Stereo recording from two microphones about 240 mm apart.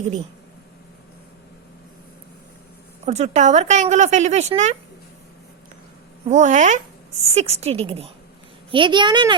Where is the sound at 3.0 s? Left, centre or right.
Right.